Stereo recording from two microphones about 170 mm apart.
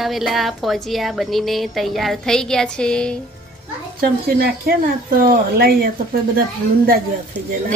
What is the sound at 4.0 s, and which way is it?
Speech, 60° right (ahead or behind).